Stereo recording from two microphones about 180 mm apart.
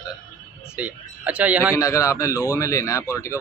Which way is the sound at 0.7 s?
10° right (ahead or behind).